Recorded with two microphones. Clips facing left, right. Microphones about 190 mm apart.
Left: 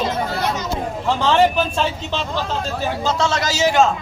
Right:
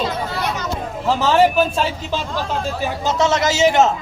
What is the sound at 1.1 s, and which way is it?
A man's voice, 5° right (ahead or behind).